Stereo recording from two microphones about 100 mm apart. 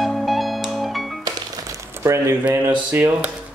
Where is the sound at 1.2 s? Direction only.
30° right (ahead or behind).